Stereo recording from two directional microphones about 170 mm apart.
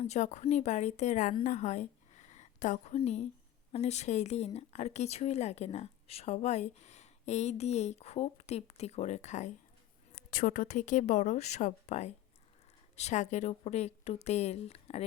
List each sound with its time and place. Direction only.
0.0 s a woman's voice: 40° left (ahead or behind)
10.2 s speech: 55° left (ahead or behind); by 15.0 s 35° left (ahead or behind)